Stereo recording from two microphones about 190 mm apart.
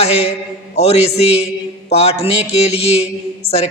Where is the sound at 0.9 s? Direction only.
35° left (ahead or behind).